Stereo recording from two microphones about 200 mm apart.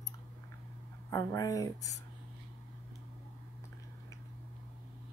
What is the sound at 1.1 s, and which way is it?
Speech, 15° left (ahead or behind).